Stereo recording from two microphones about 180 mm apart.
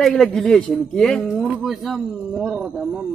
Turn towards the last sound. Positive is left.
turn(degrees=-5)  # may be behind; listen again after turning